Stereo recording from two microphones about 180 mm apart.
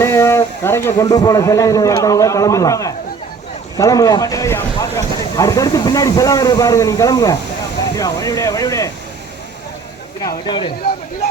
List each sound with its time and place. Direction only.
0.0 s speech: 15° left (ahead or behind)
10.2 s speech: 25° left (ahead or behind)